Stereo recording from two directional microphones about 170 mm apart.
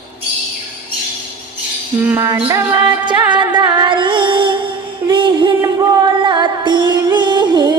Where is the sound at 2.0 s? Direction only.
15° right (ahead or behind).